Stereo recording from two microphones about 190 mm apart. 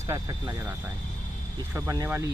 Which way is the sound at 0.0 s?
15° right (ahead or behind).